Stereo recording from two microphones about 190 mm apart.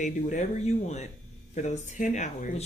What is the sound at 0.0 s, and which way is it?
Speech, 40° left (ahead or behind).